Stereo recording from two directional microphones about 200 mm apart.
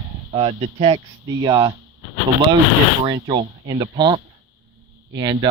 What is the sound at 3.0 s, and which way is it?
Speech, 20° right (ahead or behind).